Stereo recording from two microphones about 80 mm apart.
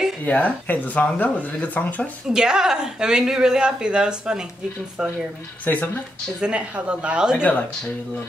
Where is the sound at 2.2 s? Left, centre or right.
Centre.